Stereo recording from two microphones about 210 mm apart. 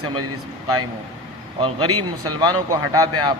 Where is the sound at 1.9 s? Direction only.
90° right.